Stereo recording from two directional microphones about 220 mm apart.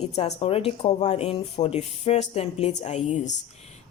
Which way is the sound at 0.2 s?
30° left (ahead or behind).